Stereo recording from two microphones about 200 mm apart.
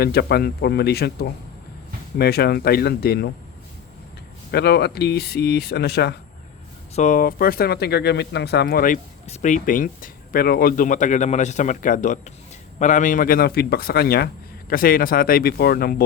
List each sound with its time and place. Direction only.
0.0 s speech: 50° left (ahead or behind)
4.5 s speech: 55° left (ahead or behind)
6.9 s speech: 40° left (ahead or behind)